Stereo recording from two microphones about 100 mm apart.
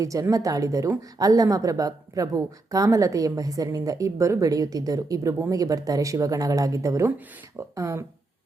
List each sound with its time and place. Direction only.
0.0 s speech: 35° right (ahead or behind)